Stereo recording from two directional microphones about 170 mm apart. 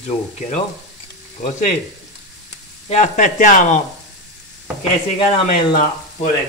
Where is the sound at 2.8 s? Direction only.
45° left (ahead or behind).